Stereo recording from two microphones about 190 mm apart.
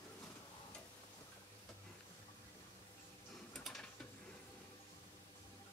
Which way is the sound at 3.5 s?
Centre (ahead or behind).